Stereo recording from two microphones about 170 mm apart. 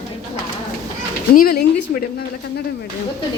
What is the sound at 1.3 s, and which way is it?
Speech, 65° left (ahead or behind).